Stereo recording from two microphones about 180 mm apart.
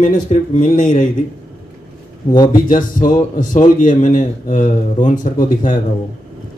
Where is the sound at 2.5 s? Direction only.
50° left (ahead or behind).